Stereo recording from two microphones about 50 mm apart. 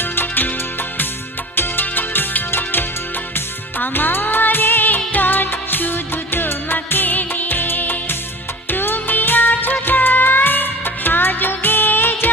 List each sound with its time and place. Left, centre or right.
0.0 s music: left
1.5 s music: left
5.1 s music of bollywood: left
8.7 s music: left